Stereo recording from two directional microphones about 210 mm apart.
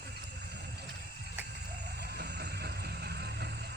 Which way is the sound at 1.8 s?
50° right (ahead or behind).